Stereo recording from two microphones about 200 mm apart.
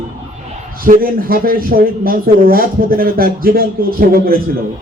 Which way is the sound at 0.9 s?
45° right (ahead or behind).